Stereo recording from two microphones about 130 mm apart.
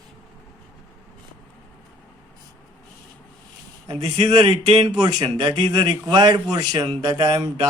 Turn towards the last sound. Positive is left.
turn(degrees=-35)  # may be behind; listen again after turning